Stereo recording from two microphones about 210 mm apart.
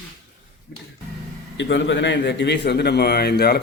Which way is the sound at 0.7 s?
55° left (ahead or behind).